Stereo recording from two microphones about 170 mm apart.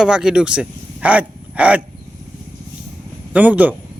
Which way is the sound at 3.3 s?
10° right (ahead or behind).